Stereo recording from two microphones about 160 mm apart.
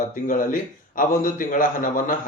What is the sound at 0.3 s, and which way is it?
Speech, 55° left (ahead or behind).